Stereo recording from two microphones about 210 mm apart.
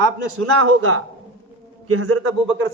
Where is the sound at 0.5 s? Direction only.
90° right.